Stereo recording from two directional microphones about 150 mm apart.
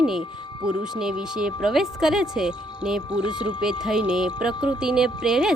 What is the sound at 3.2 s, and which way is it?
Speech, 35° left (ahead or behind).